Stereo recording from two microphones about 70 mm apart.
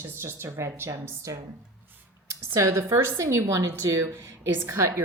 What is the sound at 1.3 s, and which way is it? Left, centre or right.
Speech, right.